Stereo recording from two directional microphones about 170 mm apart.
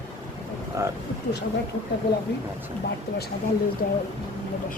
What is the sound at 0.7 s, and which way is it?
Speech, 20° right (ahead or behind).